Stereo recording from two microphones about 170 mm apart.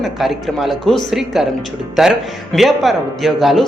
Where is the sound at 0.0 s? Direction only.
Centre (ahead or behind).